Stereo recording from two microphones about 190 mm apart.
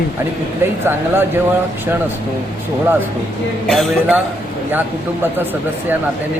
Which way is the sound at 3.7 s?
Centre (ahead or behind).